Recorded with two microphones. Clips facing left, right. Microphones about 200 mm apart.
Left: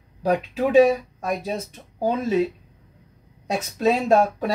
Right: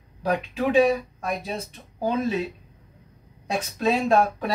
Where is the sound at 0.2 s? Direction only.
40° left (ahead or behind).